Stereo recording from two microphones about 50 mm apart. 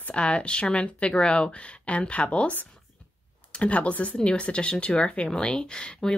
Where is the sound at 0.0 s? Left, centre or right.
Left.